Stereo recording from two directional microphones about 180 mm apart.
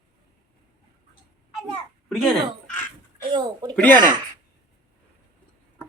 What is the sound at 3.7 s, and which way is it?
Speech, 10° left (ahead or behind).